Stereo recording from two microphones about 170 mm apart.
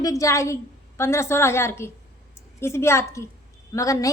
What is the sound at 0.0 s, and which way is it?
A woman's voice, 20° left (ahead or behind).